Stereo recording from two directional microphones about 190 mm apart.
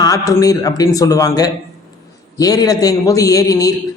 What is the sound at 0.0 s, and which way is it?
A man's voice, 15° left (ahead or behind).